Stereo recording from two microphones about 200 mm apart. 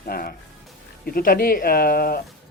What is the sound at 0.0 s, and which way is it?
Speech, 45° left (ahead or behind).